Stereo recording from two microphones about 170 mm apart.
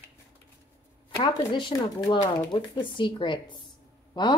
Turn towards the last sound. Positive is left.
turn(degrees=25)  # may be behind; listen again after turning